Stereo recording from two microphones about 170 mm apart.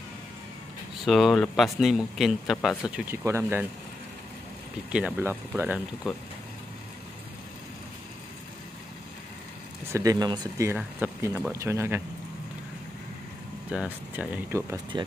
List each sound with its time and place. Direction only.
1.0 s speech: centre (ahead or behind)
2.8 s speech: 15° right (ahead or behind)
4.9 s speech: 10° right (ahead or behind)
9.9 s speech: 20° right (ahead or behind)
10.7 s speech: 10° right (ahead or behind)
13.7 s speech: 10° right (ahead or behind)